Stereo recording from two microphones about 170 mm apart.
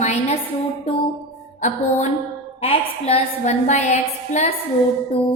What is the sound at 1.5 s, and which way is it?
Music, 45° left (ahead or behind).